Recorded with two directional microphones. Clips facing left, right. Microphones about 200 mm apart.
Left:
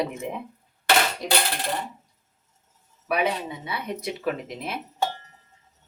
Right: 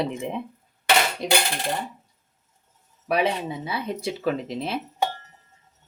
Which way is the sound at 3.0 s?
30° right (ahead or behind).